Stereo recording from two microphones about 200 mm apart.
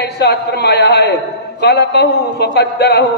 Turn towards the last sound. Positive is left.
turn(degrees=55)  # may be behind; listen again after turning